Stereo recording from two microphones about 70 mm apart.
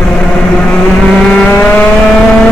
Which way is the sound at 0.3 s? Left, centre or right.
Centre.